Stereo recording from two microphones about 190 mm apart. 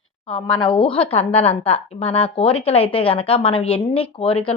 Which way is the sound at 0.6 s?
25° left (ahead or behind).